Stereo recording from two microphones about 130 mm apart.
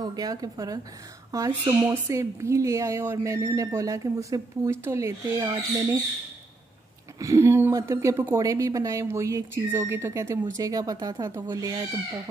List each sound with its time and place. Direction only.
0.1 s a woman's voice: 30° right (ahead or behind)
7.2 s a woman's voice: 25° right (ahead or behind)